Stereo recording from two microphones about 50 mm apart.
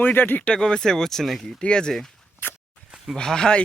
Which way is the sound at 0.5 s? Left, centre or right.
Centre.